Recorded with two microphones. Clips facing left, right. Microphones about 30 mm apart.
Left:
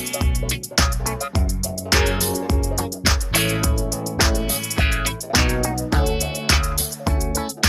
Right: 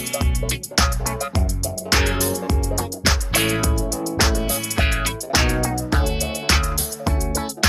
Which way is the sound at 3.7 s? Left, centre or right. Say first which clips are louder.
Right 1 dB; right.